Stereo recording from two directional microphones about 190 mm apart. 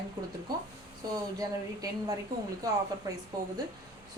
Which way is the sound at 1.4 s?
20° right (ahead or behind).